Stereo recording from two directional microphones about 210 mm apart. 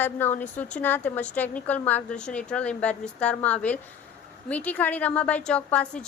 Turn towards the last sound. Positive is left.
turn(degrees=5)  # may be behind; listen again after turning